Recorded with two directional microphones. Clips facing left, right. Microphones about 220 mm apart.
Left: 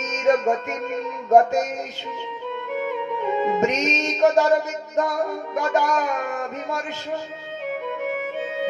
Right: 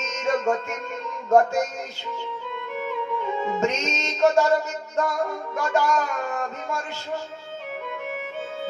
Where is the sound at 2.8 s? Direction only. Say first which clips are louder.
Left 1 dB; 20° left (ahead or behind).